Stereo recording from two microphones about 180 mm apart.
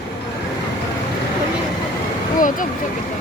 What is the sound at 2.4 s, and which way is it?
Speech, 45° left (ahead or behind).